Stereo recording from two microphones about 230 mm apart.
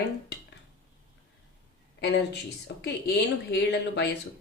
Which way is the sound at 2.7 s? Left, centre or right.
Left.